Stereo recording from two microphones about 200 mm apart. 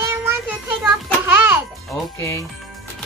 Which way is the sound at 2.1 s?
15° left (ahead or behind).